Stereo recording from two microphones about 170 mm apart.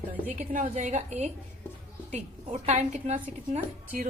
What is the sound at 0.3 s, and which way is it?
A woman's voice, 50° right (ahead or behind).